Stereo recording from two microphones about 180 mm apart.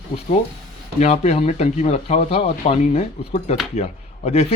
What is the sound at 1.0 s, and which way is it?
Speech, 40° left (ahead or behind).